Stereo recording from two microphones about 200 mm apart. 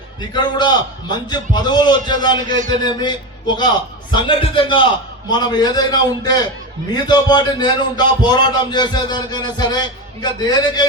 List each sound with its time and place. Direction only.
0.2 s a man's voice: 20° left (ahead or behind)